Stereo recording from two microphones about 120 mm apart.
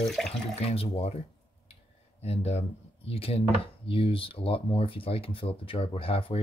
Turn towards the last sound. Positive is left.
turn(degrees=50)  # may be behind; listen again after turning